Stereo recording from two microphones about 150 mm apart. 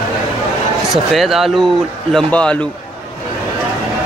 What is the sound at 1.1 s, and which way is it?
A man's voice, centre (ahead or behind).